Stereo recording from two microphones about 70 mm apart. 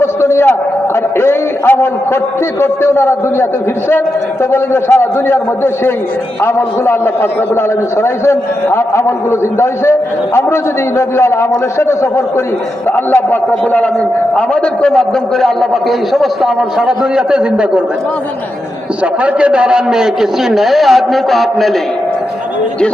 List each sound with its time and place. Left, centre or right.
0.0 s a sound: left
1.2 s a man's voice: left
4.5 s a man's voice: left
13.1 s a man's voice: left
14.3 s a man's voice: centre
19.2 s a man's voice: centre